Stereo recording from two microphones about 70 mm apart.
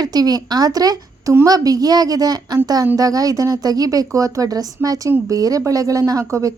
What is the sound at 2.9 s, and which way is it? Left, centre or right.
A woman's voice, right.